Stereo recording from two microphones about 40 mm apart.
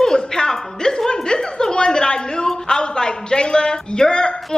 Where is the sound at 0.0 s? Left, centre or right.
Centre.